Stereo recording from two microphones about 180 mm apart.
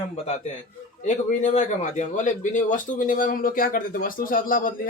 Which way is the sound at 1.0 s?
40° left (ahead or behind).